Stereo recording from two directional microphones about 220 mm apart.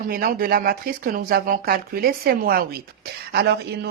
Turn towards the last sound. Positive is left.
turn(degrees=-50)  # may be behind; listen again after turning